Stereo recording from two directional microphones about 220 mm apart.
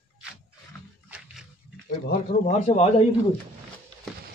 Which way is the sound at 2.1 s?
30° left (ahead or behind).